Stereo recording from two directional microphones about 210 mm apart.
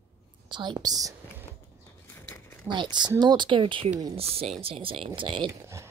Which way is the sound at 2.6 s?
20° right (ahead or behind).